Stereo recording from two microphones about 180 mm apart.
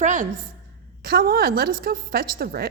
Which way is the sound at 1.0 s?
60° right (ahead or behind).